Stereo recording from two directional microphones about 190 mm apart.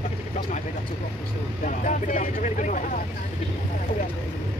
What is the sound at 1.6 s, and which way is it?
Speech, 40° left (ahead or behind).